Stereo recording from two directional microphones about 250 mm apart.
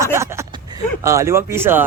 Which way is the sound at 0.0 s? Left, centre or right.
Centre.